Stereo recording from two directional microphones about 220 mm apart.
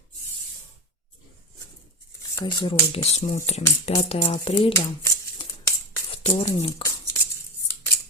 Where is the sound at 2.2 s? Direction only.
15° left (ahead or behind).